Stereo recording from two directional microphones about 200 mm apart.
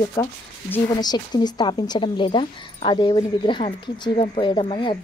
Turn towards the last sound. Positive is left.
turn(degrees=25)  # may be behind; listen again after turning